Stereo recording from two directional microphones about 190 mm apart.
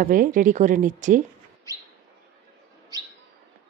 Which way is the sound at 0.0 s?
45° right (ahead or behind).